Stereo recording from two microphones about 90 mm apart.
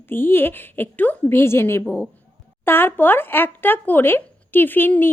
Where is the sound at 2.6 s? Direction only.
25° left (ahead or behind).